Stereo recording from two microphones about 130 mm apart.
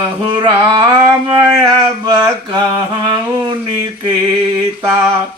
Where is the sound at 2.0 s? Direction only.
30° right (ahead or behind).